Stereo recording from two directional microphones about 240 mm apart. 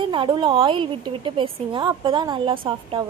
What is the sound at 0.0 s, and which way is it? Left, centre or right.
A woman's voice, right.